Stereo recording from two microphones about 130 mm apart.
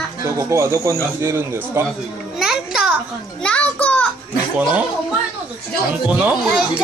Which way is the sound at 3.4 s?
10° left (ahead or behind).